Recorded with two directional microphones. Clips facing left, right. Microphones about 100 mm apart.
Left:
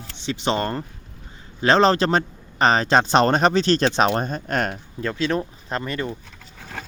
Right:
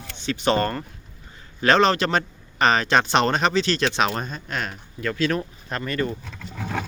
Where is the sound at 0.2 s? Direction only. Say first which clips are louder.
Right 2 dB; 20° left (ahead or behind); by 4.7 s 50° left (ahead or behind).